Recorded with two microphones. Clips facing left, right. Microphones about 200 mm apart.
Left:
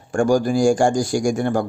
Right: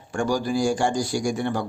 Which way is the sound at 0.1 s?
45° left (ahead or behind).